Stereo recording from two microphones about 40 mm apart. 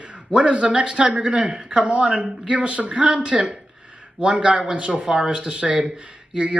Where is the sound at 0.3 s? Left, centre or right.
Right.